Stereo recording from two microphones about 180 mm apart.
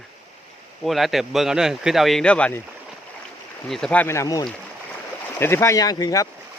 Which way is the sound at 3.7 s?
5° left (ahead or behind).